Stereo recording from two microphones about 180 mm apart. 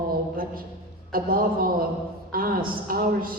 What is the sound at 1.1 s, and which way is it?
A man's voice, 55° right (ahead or behind).